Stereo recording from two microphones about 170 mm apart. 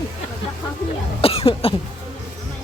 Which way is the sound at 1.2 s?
35° left (ahead or behind).